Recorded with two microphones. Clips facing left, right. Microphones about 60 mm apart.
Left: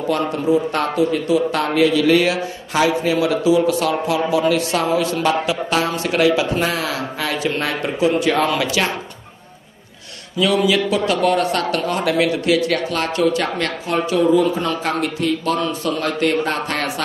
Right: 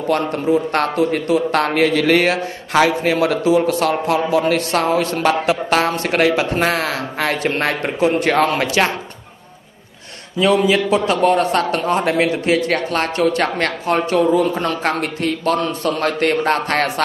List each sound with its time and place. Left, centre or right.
0.5 s speech: right
10.4 s speech: right